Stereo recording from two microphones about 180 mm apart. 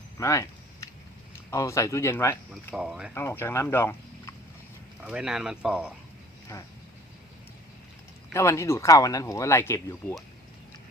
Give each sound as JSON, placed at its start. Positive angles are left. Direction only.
{"t": 0.2, "sound": "a sound", "side_deg": 15}
{"t": 1.3, "sound": "a man's voice", "side_deg": 15}
{"t": 2.7, "sound": "speech", "side_deg": -5}
{"t": 3.2, "sound": "speech", "side_deg": 15}
{"t": 5.0, "sound": "speech", "side_deg": -5}
{"t": 8.3, "sound": "speech", "side_deg": 15}